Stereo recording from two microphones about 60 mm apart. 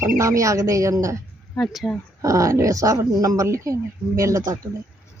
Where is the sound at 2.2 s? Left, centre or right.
Right.